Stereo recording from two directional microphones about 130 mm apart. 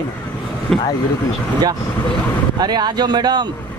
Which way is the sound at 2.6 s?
35° right (ahead or behind).